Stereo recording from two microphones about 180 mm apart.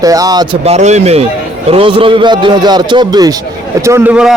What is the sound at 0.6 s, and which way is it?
A man's voice, 35° right (ahead or behind).